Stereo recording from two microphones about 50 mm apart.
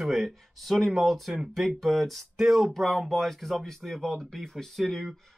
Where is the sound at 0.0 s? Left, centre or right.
Centre.